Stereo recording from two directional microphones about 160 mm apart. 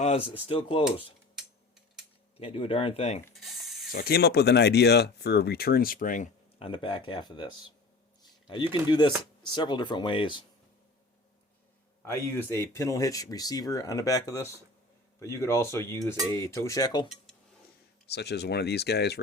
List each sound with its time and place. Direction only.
0.0 s speech: 40° left (ahead or behind)
1.4 s a sound: 5° right (ahead or behind)
2.4 s speech: 35° left (ahead or behind)
3.4 s ratchet: centre (ahead or behind)
3.9 s speech: 75° left (ahead or behind); by 6.2 s 55° left (ahead or behind)
6.6 s speech: 35° left (ahead or behind)
8.9 s speech: 30° left (ahead or behind)
12.0 s speech: 15° left (ahead or behind)
18.0 s speech: 90° left